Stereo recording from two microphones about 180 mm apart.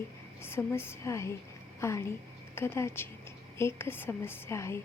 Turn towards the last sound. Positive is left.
turn(degrees=15)  # may be behind; listen again after turning